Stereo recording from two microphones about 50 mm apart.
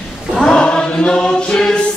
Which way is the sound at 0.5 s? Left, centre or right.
Centre.